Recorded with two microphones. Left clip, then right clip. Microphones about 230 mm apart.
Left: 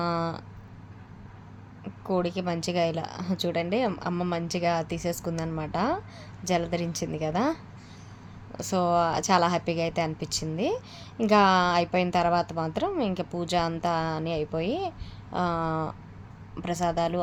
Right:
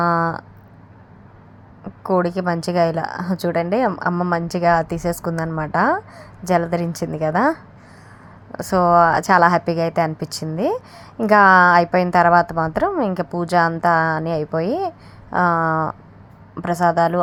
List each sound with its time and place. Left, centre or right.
0.0 s a sound: right
1.8 s a woman's voice: right
8.5 s a woman's voice: right